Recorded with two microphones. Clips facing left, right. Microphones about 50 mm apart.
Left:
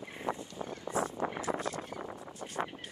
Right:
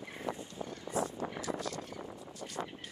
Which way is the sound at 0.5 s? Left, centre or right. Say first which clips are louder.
Right 1 dB; left.